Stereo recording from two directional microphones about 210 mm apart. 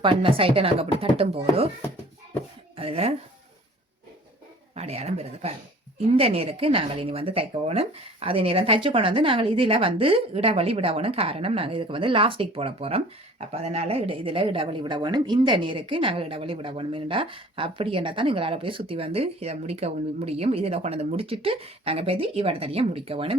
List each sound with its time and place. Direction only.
0.0 s speech: 25° right (ahead or behind)
2.7 s speech: 30° right (ahead or behind)
4.7 s speech: 30° right (ahead or behind)